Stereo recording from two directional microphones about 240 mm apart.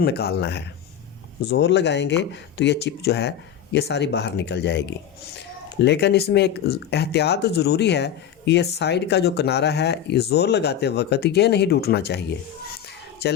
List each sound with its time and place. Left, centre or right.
0.0 s speech: left
13.2 s speech: left